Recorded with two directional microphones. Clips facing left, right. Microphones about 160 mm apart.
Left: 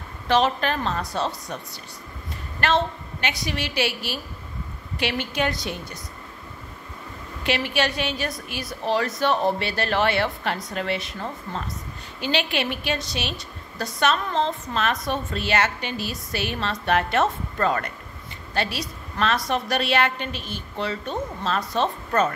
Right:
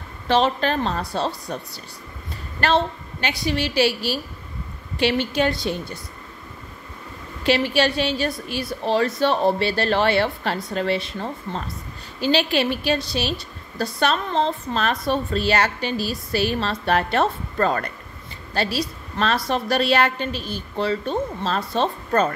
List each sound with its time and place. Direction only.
0.3 s a woman's voice: 30° right (ahead or behind)
2.6 s a woman's voice: 35° right (ahead or behind)
7.4 s a woman's voice: 30° right (ahead or behind)